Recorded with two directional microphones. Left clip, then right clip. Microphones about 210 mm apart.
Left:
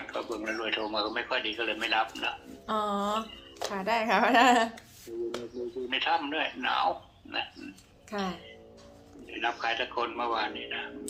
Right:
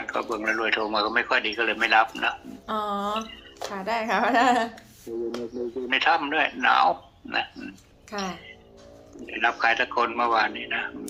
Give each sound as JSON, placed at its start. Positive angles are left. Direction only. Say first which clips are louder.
{"t": 0.0, "sound": "speech", "louder": "right 7 dB", "side_deg": -50}
{"t": 2.6, "sound": "speech", "louder": "right 2 dB", "side_deg": -5}
{"t": 5.1, "sound": "speech", "louder": "right 5 dB", "side_deg": -50}
{"t": 8.1, "sound": "a woman's voice", "louder": "right 3 dB", "side_deg": -10}
{"t": 9.2, "sound": "speech", "louder": "right 8 dB", "side_deg": -50}